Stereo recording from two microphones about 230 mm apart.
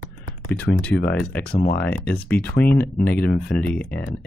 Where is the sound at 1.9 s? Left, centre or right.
Centre.